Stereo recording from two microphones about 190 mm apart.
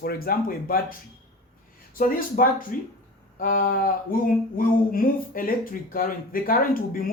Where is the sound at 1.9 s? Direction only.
45° left (ahead or behind).